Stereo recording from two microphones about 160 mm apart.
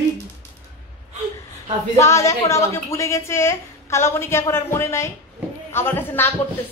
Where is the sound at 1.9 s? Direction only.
15° left (ahead or behind).